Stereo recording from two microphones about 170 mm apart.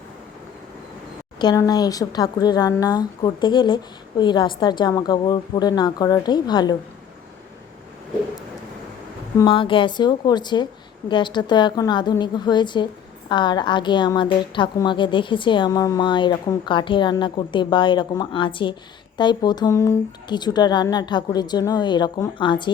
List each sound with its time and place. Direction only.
1.4 s a woman's voice: 25° left (ahead or behind)
9.4 s a woman's voice: 30° left (ahead or behind)